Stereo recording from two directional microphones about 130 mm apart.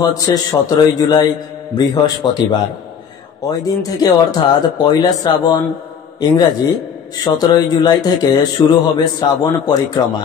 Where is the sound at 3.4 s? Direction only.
25° left (ahead or behind).